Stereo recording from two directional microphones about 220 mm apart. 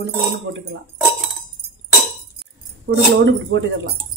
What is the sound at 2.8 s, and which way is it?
A woman's voice, 55° right (ahead or behind).